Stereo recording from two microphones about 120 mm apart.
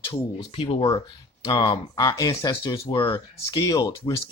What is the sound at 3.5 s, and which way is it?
Speech, 35° left (ahead or behind).